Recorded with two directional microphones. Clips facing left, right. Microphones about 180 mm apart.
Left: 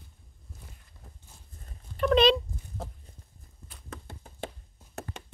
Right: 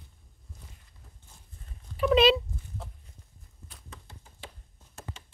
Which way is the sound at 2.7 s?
40° left (ahead or behind).